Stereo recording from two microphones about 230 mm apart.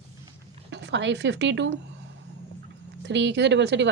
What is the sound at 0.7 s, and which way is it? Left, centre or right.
A woman's voice, right.